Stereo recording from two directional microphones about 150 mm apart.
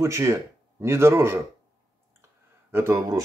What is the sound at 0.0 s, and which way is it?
Speech, 20° right (ahead or behind).